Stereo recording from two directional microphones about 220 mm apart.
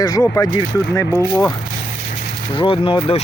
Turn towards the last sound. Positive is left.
turn(degrees=25)  # may be behind; listen again after turning